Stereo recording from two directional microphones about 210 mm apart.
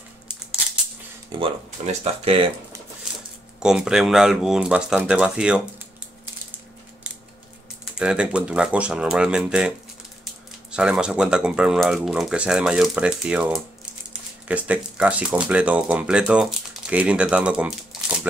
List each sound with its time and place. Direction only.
1.3 s speech: 25° right (ahead or behind)
3.5 s speech: 5° right (ahead or behind)
7.9 s speech: 5° right (ahead or behind)
10.7 s speech: 5° right (ahead or behind)